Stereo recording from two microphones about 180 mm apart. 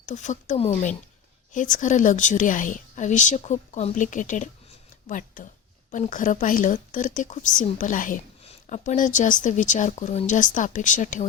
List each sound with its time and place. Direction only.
0.0 s a woman's voice: 45° left (ahead or behind)